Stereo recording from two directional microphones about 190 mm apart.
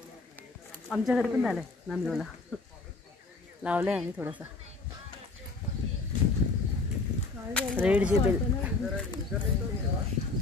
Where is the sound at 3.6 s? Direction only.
10° right (ahead or behind).